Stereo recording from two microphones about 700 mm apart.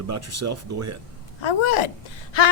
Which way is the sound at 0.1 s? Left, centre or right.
Right.